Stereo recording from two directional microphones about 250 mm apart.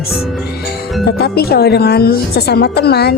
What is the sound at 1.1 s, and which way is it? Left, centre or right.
Speech, left.